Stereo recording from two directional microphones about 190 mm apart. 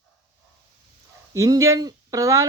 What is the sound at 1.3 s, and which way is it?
Speech, 15° right (ahead or behind).